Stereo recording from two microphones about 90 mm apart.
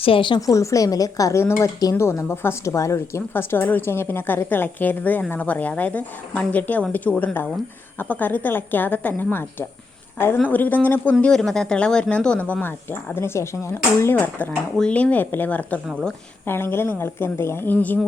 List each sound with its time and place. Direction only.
0.0 s a woman's voice: 80° left
0.3 s speech: 35° left (ahead or behind)
1.8 s speech: 40° left (ahead or behind)
2.0 s a woman's voice: 25° left (ahead or behind)